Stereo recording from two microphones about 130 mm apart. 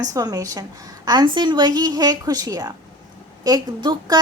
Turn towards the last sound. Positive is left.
turn(degrees=-30)  # may be behind; listen again after turning